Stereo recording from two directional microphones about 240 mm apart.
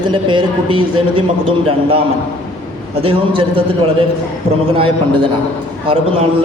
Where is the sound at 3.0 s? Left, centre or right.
Right.